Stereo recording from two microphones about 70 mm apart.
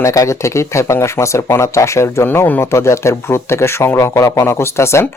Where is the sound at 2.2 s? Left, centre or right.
Left.